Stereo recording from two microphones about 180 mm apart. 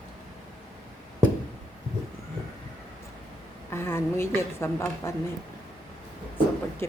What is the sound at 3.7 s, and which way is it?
A woman's voice, 15° left (ahead or behind).